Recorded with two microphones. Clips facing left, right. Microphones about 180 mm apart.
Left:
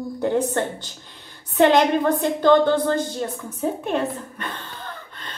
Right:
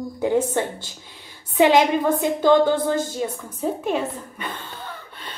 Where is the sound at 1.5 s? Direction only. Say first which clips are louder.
Even; 5° right (ahead or behind).